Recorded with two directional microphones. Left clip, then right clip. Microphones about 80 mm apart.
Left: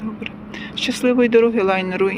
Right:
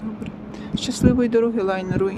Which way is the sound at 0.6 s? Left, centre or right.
Centre.